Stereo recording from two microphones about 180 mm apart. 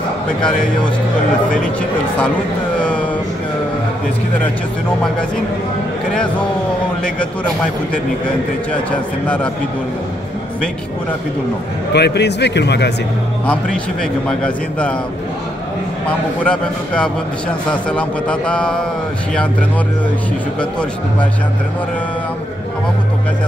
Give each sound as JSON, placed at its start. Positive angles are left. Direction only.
{"t": 1.6, "sound": "a man's voice", "side_deg": 5}
{"t": 8.9, "sound": "a man's voice", "side_deg": 5}
{"t": 11.9, "sound": "speech", "side_deg": 70}
{"t": 14.2, "sound": "a man's voice", "side_deg": 5}
{"t": 16.1, "sound": "a man's voice", "side_deg": 5}